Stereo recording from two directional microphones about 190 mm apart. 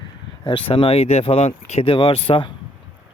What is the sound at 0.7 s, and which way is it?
Speech, 30° left (ahead or behind).